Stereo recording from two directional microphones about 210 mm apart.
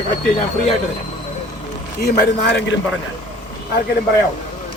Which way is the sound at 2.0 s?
50° left (ahead or behind).